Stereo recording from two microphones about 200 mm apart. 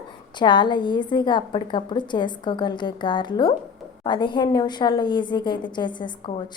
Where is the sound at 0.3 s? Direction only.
25° left (ahead or behind).